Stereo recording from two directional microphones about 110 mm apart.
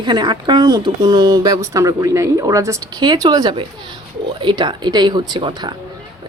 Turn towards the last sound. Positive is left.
turn(degrees=-45)  # may be behind; listen again after turning